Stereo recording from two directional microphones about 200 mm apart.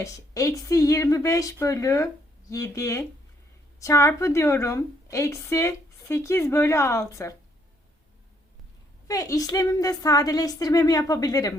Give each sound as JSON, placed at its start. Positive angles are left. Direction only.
{"t": 0.0, "sound": "a woman's voice", "side_deg": 15}
{"t": 9.0, "sound": "a woman's voice", "side_deg": 15}